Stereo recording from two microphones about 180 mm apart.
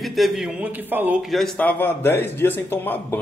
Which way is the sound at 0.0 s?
Centre (ahead or behind).